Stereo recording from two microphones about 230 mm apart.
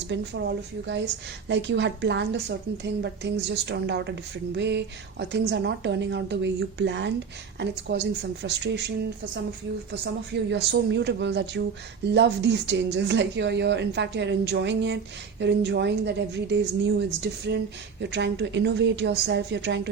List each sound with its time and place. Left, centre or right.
0.1 s a woman's voice: right
10.5 s a woman's voice: right